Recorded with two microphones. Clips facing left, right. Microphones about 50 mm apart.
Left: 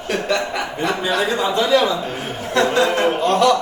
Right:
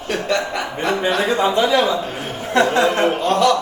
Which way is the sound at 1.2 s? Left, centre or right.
Right.